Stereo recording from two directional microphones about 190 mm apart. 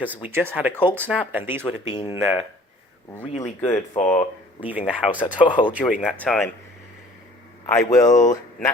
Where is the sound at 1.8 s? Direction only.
25° left (ahead or behind).